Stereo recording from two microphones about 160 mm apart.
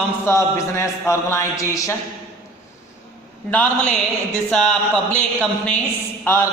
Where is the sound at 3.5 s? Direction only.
10° left (ahead or behind).